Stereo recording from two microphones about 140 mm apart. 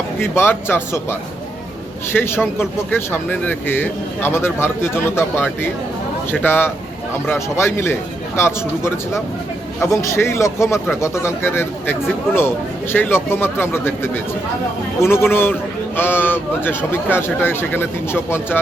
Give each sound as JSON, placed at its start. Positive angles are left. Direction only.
{"t": 0.2, "sound": "speech", "side_deg": 15}
{"t": 2.1, "sound": "a man's voice", "side_deg": 15}